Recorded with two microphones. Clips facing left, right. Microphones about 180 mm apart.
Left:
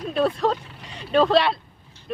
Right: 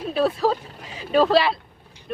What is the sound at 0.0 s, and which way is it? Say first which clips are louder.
Speech: right 1 dB; 5° right (ahead or behind).